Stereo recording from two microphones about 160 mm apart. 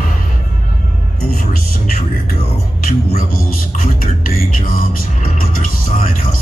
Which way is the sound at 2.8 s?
65° left (ahead or behind).